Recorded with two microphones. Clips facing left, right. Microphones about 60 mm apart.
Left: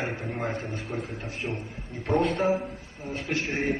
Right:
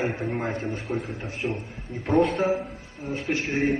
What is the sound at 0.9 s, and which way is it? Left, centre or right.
Speech, right.